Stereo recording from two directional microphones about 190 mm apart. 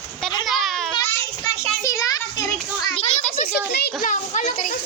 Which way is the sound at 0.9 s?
10° left (ahead or behind).